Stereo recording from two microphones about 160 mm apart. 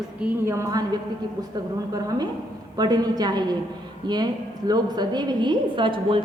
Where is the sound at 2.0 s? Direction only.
25° right (ahead or behind).